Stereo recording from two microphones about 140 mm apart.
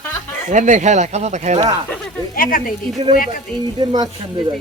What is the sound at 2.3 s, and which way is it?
Speech, 90° left.